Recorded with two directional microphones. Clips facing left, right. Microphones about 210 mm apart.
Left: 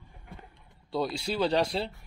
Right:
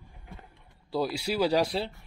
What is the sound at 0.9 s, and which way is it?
Speech, 5° right (ahead or behind).